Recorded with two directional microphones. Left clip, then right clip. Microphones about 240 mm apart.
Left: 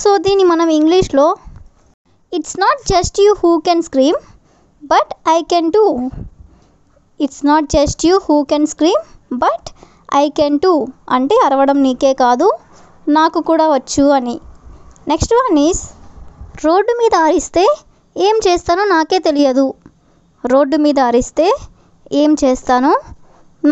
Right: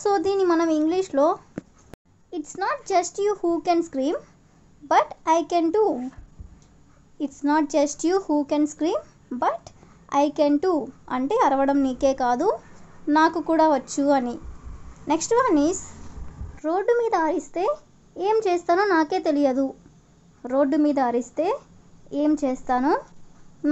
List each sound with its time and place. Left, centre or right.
0.0 s speech: left
7.2 s speech: left
23.6 s a sound: left